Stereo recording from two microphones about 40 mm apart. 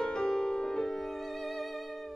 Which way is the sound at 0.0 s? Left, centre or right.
Centre.